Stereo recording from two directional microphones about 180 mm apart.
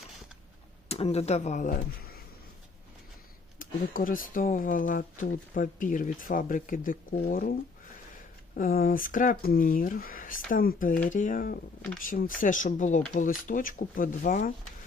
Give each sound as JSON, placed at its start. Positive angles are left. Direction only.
{"t": 0.9, "sound": "speech", "side_deg": 35}
{"t": 3.6, "sound": "speech", "side_deg": 50}
{"t": 8.5, "sound": "speech", "side_deg": 55}